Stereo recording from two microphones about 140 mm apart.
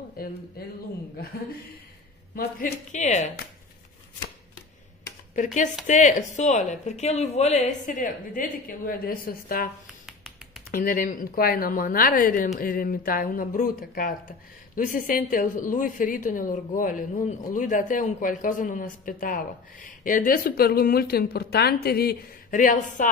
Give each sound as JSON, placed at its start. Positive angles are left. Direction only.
{"t": 0.2, "sound": "speech", "side_deg": 90}
{"t": 2.3, "sound": "a woman's voice", "side_deg": 70}
{"t": 5.3, "sound": "a woman's voice", "side_deg": 65}
{"t": 10.0, "sound": "finger snapping", "side_deg": 0}
{"t": 10.7, "sound": "speech", "side_deg": 85}
{"t": 14.8, "sound": "a woman's voice", "side_deg": 70}